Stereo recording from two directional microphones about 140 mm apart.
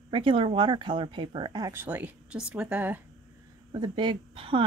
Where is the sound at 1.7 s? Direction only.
15° right (ahead or behind).